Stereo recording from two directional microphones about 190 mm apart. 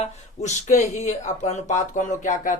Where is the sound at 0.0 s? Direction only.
35° left (ahead or behind).